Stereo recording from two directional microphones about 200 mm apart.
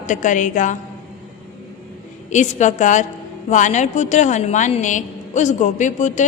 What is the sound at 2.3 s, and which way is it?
A woman's voice, 35° left (ahead or behind).